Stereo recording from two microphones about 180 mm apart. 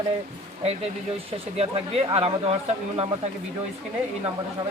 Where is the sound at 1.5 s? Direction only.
35° right (ahead or behind).